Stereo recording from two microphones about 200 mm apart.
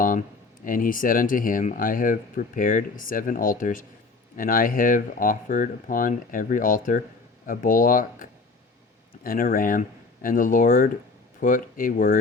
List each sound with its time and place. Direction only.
0.0 s speech: 40° left (ahead or behind)